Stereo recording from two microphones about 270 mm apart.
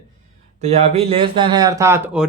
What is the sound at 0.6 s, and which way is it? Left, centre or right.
Speech, right.